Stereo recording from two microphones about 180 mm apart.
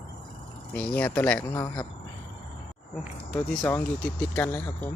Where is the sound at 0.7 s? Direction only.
5° left (ahead or behind).